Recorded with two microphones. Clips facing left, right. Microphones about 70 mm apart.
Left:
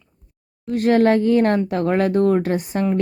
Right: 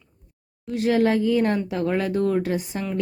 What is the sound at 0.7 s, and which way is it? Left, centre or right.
A woman's voice, left.